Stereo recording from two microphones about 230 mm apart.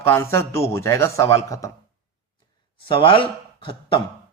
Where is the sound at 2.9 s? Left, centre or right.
Left.